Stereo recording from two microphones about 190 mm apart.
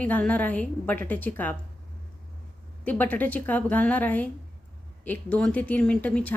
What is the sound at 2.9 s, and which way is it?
Speech, 10° left (ahead or behind).